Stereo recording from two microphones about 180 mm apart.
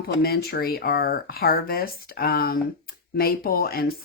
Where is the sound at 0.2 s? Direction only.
60° left (ahead or behind).